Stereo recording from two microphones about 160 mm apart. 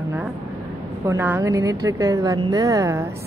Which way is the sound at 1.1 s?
15° right (ahead or behind).